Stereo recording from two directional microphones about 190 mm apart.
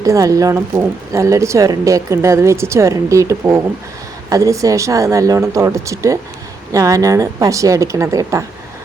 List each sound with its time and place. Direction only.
0.0 s a woman's voice: 20° right (ahead or behind)